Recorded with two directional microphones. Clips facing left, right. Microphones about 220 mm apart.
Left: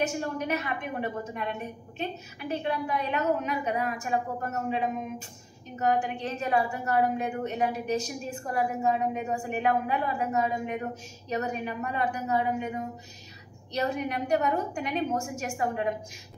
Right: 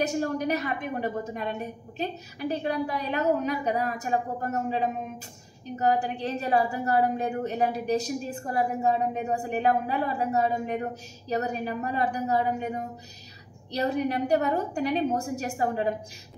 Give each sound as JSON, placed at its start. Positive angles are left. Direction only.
{"t": 0.0, "sound": "a woman's voice", "side_deg": -35}
{"t": 13.7, "sound": "a woman's voice", "side_deg": -35}